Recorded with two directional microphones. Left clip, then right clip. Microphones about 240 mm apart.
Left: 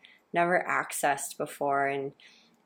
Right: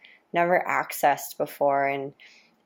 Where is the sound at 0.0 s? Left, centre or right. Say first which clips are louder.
Right 3 dB; right.